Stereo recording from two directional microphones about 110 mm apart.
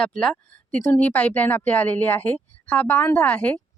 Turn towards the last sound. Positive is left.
turn(degrees=15)  # may be behind; listen again after turning